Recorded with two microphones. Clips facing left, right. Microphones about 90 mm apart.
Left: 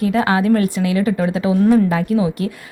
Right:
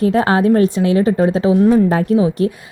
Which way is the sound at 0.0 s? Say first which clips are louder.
Right 3 dB; 35° right (ahead or behind).